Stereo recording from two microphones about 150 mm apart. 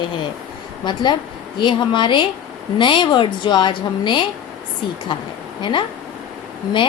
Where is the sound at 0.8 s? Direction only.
30° left (ahead or behind).